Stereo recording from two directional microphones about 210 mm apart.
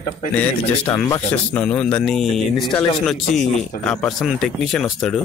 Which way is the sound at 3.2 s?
30° left (ahead or behind).